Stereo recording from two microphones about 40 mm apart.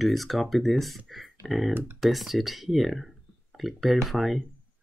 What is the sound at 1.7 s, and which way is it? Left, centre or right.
Speech, right.